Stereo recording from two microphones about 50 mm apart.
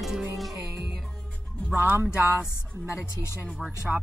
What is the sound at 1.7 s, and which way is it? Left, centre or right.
Music, right.